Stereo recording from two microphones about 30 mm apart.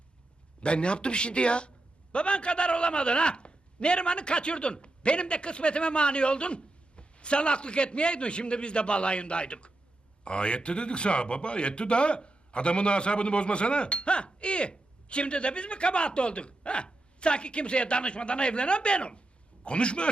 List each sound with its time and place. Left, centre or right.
0.6 s a man's voice: left